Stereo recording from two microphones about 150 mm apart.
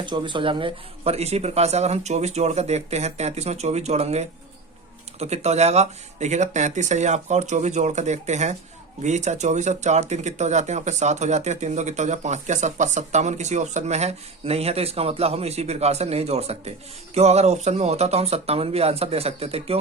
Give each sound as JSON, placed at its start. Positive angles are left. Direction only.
{"t": 0.0, "sound": "speech", "side_deg": -30}